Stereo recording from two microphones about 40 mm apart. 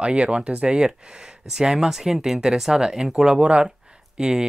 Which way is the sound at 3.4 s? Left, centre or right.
Right.